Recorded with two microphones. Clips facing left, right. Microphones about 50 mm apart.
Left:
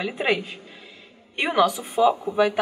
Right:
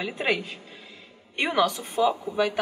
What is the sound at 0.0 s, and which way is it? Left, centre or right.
A woman's voice, centre.